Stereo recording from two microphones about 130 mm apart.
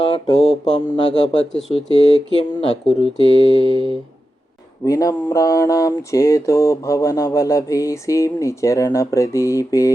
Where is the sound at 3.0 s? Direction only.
45° right (ahead or behind).